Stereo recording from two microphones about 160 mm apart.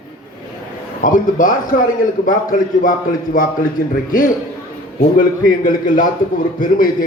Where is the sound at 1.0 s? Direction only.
55° left (ahead or behind).